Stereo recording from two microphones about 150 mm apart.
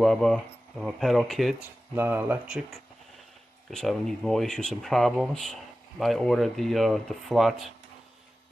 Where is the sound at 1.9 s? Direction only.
15° right (ahead or behind).